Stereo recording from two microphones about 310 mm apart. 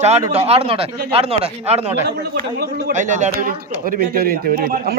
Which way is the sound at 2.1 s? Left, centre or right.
Right.